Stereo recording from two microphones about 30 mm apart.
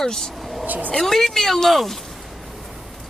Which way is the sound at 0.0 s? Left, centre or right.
Centre.